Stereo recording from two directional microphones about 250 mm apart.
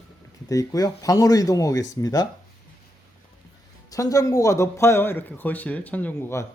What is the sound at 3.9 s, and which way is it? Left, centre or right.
A man's voice, centre.